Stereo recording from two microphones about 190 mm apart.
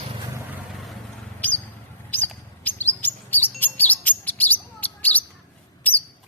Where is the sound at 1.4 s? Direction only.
10° left (ahead or behind).